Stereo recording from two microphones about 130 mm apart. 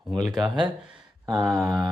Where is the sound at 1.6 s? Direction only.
Centre (ahead or behind).